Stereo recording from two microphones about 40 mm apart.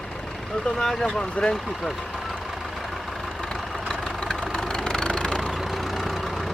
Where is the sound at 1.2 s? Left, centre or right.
Left.